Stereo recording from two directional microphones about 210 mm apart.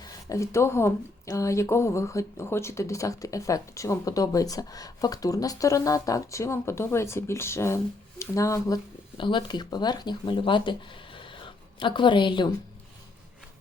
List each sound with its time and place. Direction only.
0.0 s speech: 15° left (ahead or behind)